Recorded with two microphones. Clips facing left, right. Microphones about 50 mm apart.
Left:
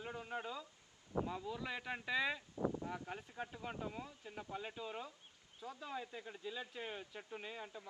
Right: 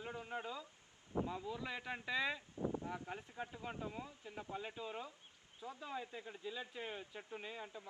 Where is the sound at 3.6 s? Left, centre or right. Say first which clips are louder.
Left 1 dB; centre.